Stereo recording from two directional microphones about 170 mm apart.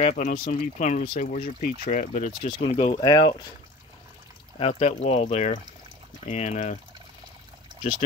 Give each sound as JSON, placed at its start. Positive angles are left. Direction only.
{"t": 0.0, "sound": "speech", "side_deg": 45}
{"t": 2.4, "sound": "speech", "side_deg": 35}
{"t": 4.6, "sound": "speech", "side_deg": 35}